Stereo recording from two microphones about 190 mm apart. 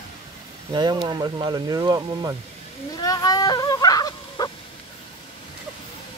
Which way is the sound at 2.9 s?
20° left (ahead or behind).